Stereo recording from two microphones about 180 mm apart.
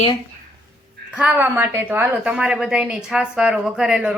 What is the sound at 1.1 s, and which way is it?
A woman's voice, 10° right (ahead or behind).